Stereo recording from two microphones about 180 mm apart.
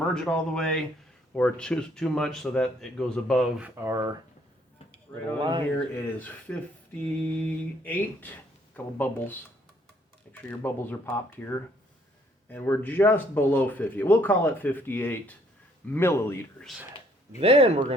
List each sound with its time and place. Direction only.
0.0 s speech: 5° left (ahead or behind)
3.6 s speech: 15° right (ahead or behind)
5.4 s speech: 25° right (ahead or behind)
6.1 s speech: 10° left (ahead or behind)
17.4 s speech: 30° right (ahead or behind)